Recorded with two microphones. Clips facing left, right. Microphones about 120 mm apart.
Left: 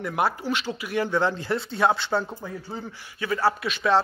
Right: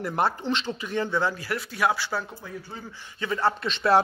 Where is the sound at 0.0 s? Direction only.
5° left (ahead or behind); by 2.2 s 20° left (ahead or behind).